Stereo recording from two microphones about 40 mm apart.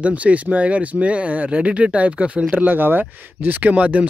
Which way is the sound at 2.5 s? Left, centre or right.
Right.